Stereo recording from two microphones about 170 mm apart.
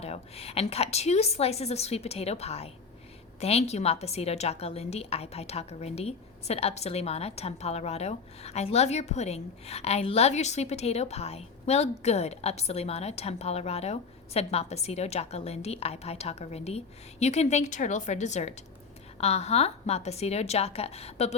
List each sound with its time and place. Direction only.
0.0 s a woman's voice: 35° left (ahead or behind)